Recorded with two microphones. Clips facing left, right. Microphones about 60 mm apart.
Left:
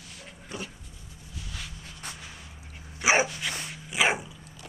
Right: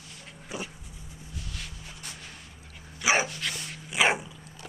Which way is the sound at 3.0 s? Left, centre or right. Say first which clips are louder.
Left 2 dB; centre.